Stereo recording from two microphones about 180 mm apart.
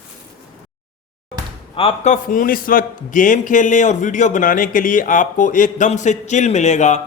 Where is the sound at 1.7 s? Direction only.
30° left (ahead or behind).